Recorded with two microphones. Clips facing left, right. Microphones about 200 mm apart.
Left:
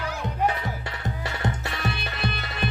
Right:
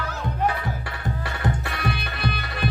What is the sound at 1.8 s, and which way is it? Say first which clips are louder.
Music: right 2 dB; 25° left (ahead or behind).